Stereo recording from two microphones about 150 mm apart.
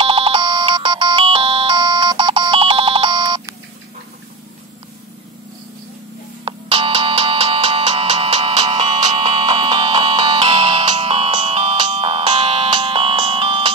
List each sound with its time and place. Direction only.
0.0 s ringtone: 40° right (ahead or behind)
6.4 s music: 35° right (ahead or behind)